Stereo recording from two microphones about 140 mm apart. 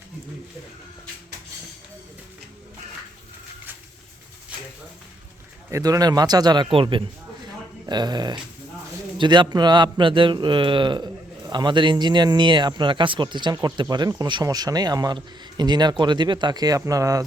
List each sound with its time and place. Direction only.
5.7 s a man's voice: 25° right (ahead or behind)